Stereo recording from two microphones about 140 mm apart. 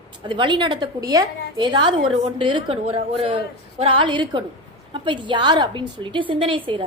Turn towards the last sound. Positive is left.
turn(degrees=-35)  # may be behind; listen again after turning